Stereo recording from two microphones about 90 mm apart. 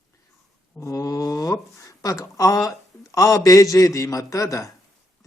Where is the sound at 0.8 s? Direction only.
35° left (ahead or behind).